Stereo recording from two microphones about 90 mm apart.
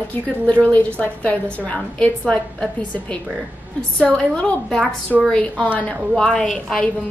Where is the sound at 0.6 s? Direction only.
20° left (ahead or behind).